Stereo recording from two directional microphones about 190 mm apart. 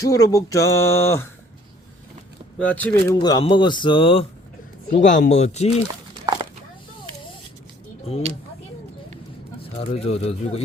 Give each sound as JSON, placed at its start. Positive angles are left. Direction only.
{"t": 0.0, "sound": "speech", "side_deg": 20}
{"t": 2.6, "sound": "speech", "side_deg": 10}
{"t": 3.2, "sound": "speech", "side_deg": 25}
{"t": 5.0, "sound": "speech", "side_deg": 40}
{"t": 6.2, "sound": "a sound", "side_deg": -25}
{"t": 9.7, "sound": "speech", "side_deg": 35}